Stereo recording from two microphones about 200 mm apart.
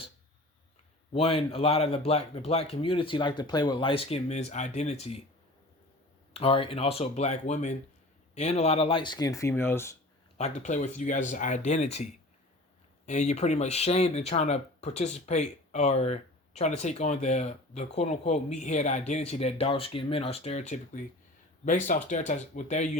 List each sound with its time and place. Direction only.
1.1 s speech: 30° left (ahead or behind)
6.3 s speech: 30° left (ahead or behind); by 9.9 s 10° left (ahead or behind)
10.3 s speech: 35° left (ahead or behind)
13.1 s speech: 35° left (ahead or behind)